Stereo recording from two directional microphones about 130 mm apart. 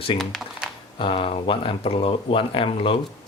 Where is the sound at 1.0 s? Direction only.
45° left (ahead or behind).